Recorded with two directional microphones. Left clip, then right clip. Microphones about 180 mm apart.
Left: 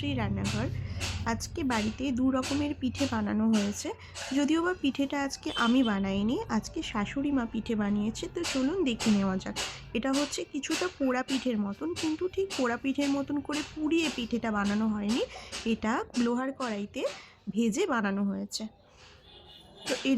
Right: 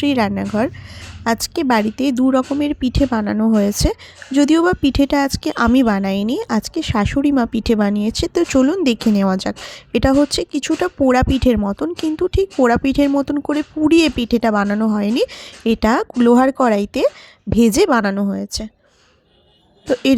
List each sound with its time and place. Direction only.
0.0 s a woman's voice: 55° right (ahead or behind)